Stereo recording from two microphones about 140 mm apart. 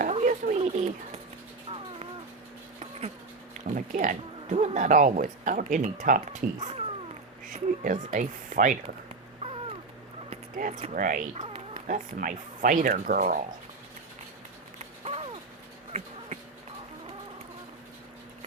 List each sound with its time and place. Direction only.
0.0 s a sound: 60° right (ahead or behind)
3.8 s speech: 65° right (ahead or behind)
9.4 s cat: 45° right (ahead or behind)
10.6 s speech: 55° right (ahead or behind)
10.9 s speech: 75° right (ahead or behind)
15.0 s a sound: 45° right (ahead or behind)